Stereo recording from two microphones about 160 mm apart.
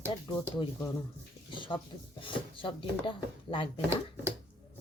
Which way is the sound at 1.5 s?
30° left (ahead or behind).